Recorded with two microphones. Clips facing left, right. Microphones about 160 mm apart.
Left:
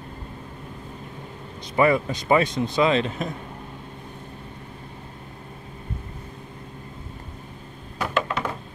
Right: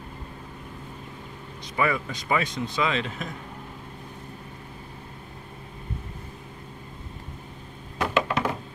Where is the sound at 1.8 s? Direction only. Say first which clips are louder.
Left 7 dB; 35° left (ahead or behind).